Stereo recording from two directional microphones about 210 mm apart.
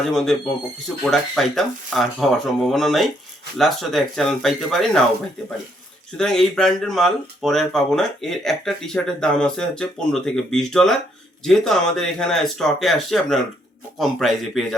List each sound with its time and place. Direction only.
0.0 s speech: centre (ahead or behind)
6.1 s speech: 5° left (ahead or behind)